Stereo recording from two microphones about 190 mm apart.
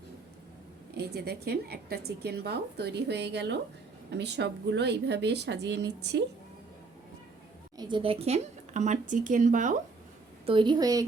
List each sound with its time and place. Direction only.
0.9 s a woman's voice: 60° right (ahead or behind)
7.8 s speech: 25° right (ahead or behind); by 9.7 s 40° right (ahead or behind)
10.4 s a woman's voice: 25° right (ahead or behind)